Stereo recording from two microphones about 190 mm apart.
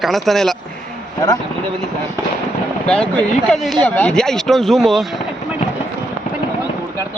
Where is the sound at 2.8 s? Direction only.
5° left (ahead or behind).